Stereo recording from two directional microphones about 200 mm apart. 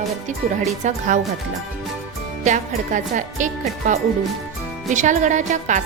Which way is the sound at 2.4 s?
40° right (ahead or behind).